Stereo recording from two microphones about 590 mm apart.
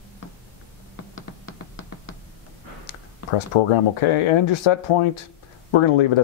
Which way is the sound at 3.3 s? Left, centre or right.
Left.